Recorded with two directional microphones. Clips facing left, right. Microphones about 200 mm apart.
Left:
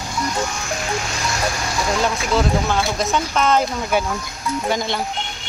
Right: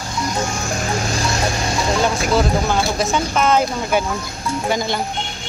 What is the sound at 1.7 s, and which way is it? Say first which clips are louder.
Vehicle: right 2 dB; 25° right (ahead or behind).